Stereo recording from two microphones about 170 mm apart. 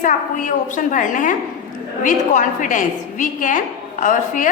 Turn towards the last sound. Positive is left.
turn(degrees=50)  # may be behind; listen again after turning